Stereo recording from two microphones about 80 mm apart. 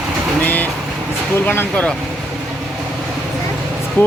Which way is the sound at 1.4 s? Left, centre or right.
Left.